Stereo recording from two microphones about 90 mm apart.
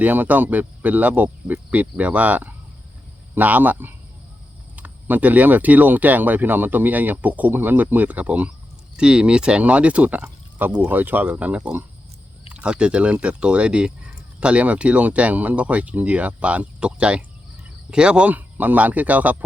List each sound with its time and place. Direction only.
0.0 s speech: 20° right (ahead or behind)